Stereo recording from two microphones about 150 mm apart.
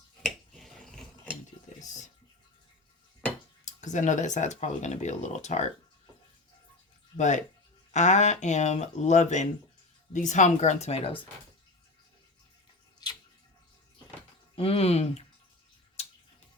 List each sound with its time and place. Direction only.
0.2 s finger snapping: centre (ahead or behind)
3.7 s speech: 55° left (ahead or behind)
7.2 s speech: 55° left (ahead or behind)
14.5 s speech: 40° left (ahead or behind)
16.0 s a sound: 45° left (ahead or behind)